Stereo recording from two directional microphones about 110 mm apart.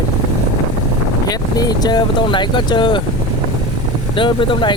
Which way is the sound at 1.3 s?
35° left (ahead or behind).